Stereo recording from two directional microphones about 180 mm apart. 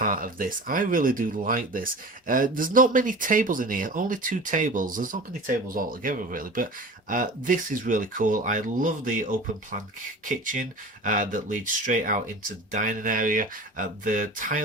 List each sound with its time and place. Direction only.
0.0 s speech: 50° right (ahead or behind)